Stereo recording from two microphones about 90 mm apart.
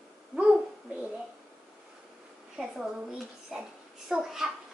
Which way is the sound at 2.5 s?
5° right (ahead or behind).